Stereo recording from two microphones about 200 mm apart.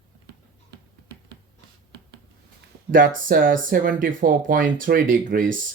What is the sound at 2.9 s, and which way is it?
Speech, 45° right (ahead or behind).